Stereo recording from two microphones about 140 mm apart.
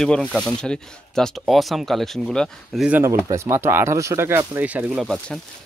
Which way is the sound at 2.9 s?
20° right (ahead or behind).